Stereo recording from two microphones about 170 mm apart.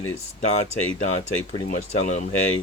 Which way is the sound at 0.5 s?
40° left (ahead or behind).